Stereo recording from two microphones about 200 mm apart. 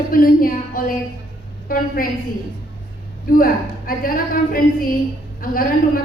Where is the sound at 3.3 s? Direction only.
45° left (ahead or behind).